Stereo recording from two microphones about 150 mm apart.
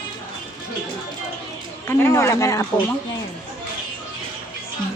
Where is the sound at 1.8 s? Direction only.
15° left (ahead or behind).